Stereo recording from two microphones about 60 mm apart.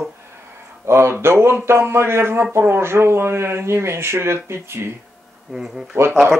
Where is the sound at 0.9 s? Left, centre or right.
Right.